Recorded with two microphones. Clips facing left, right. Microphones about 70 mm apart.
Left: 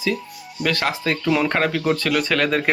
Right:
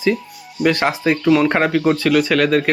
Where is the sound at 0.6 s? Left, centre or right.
Right.